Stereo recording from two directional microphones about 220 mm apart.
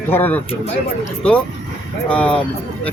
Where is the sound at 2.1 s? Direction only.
5° left (ahead or behind).